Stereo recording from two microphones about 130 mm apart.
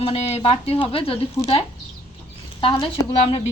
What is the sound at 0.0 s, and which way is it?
A woman's voice, 50° left (ahead or behind).